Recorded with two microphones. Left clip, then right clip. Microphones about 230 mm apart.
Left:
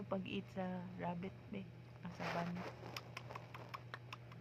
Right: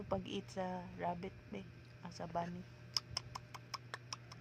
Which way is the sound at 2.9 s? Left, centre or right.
Centre.